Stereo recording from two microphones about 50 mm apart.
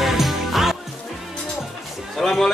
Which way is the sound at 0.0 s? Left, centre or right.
Centre.